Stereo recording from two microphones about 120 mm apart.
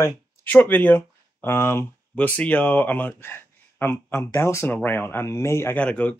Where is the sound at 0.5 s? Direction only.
15° left (ahead or behind).